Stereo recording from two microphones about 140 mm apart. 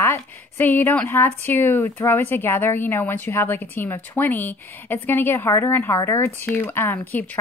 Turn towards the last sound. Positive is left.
turn(degrees=15)  # may be behind; listen again after turning